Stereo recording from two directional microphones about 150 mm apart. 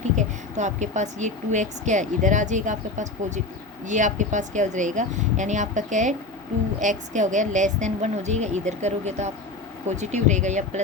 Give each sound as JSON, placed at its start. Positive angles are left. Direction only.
{"t": 0.2, "sound": "a woman's voice", "side_deg": -50}